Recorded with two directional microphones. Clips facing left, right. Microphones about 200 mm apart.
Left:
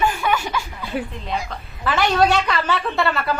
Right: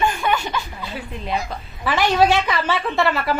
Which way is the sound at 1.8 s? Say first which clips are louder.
Right 1 dB; centre (ahead or behind).